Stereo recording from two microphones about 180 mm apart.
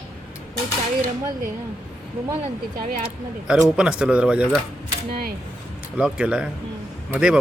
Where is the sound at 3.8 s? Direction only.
5° right (ahead or behind).